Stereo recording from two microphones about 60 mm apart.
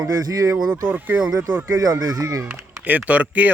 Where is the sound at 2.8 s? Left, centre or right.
Right.